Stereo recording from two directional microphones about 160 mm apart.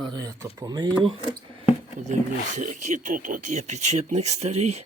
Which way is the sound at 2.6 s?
50° right (ahead or behind).